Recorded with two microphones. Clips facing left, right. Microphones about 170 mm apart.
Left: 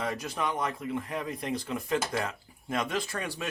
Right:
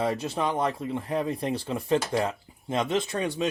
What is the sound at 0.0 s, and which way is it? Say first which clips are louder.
Speech: right 5 dB; 30° right (ahead or behind).